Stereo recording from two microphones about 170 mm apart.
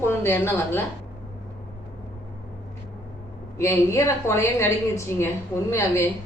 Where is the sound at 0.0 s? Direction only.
15° left (ahead or behind).